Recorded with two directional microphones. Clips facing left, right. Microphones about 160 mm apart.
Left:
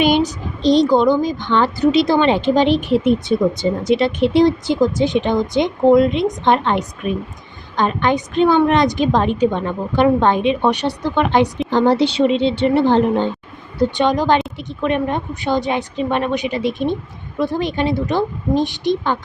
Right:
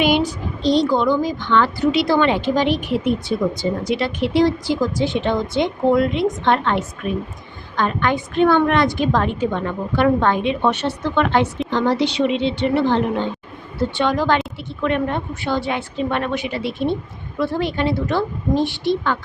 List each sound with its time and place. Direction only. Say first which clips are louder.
0.0 s speech: left 2 dB; 20° left (ahead or behind)
11.7 s speech: left 4 dB; 30° left (ahead or behind)
13.7 s a woman's voice: left 3 dB; 15° left (ahead or behind)